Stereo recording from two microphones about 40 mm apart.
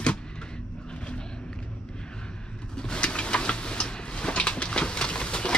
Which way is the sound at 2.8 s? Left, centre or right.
Left.